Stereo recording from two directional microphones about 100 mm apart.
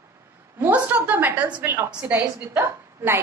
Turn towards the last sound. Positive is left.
turn(degrees=-20)  # may be behind; listen again after turning